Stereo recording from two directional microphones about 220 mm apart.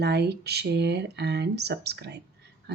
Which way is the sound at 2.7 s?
50° right (ahead or behind).